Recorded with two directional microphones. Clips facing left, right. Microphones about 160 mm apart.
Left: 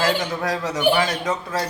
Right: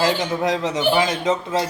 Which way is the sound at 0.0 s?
20° right (ahead or behind).